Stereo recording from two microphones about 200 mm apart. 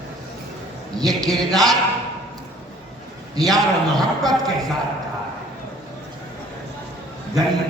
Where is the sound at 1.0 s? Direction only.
20° right (ahead or behind).